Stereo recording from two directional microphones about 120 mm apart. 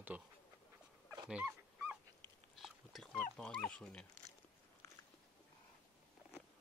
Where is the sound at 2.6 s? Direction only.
Centre (ahead or behind).